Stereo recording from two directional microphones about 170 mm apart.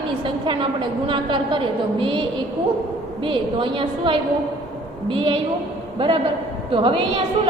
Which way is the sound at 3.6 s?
30° right (ahead or behind).